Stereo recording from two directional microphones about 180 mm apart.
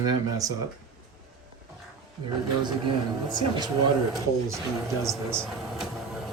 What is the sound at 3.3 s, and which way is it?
Speech, 25° right (ahead or behind).